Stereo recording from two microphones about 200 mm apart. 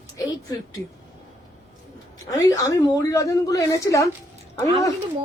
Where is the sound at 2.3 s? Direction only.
15° left (ahead or behind).